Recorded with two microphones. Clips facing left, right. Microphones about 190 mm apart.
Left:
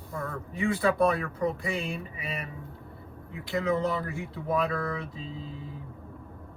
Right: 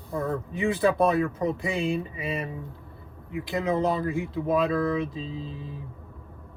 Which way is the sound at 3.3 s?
15° right (ahead or behind).